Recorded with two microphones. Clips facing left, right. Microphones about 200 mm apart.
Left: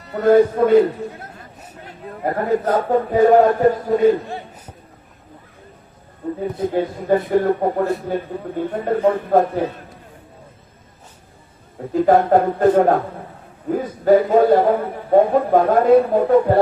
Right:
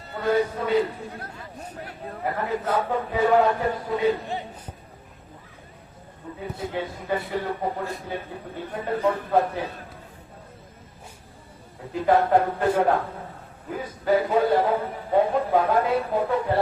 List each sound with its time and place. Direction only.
0.1 s a man's voice: 50° left (ahead or behind)
2.2 s a man's voice: 40° left (ahead or behind)
4.3 s a sound: 20° right (ahead or behind)
6.2 s a man's voice: 40° left (ahead or behind)
7.3 s a man's voice: 50° left (ahead or behind)
11.9 s a man's voice: 45° left (ahead or behind)